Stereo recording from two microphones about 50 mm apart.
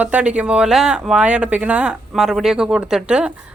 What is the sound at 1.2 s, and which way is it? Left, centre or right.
Speech, right.